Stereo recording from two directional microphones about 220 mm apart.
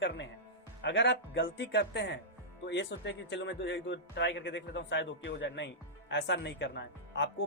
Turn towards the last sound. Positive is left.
turn(degrees=50)  # may be behind; listen again after turning